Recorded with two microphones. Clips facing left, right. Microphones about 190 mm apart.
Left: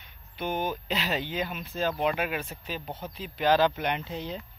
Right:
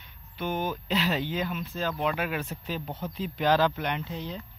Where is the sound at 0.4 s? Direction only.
15° left (ahead or behind).